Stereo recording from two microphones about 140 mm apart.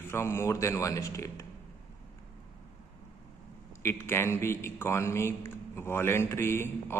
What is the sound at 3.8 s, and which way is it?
A man's voice, 20° left (ahead or behind).